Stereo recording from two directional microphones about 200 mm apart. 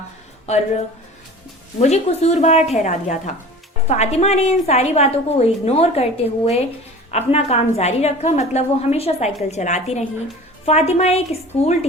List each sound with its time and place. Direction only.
1.8 s a woman's voice: 35° left (ahead or behind)